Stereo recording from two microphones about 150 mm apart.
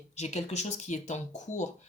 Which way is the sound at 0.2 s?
50° left (ahead or behind).